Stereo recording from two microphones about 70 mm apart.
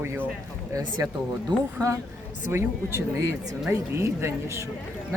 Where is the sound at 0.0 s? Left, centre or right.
Right.